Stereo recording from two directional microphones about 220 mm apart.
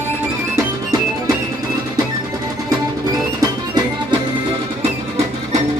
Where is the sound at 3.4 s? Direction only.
20° right (ahead or behind).